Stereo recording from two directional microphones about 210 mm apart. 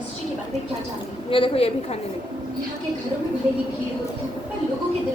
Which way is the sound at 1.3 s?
25° left (ahead or behind).